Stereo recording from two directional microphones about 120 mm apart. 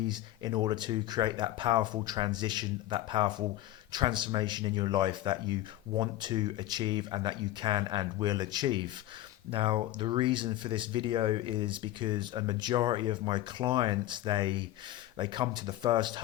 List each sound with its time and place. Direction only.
0.1 s speech: 35° right (ahead or behind)